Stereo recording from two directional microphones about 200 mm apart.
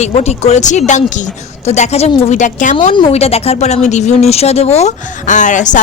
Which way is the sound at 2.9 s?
25° left (ahead or behind).